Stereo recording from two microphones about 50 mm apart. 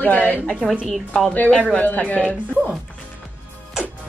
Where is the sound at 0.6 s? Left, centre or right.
Centre.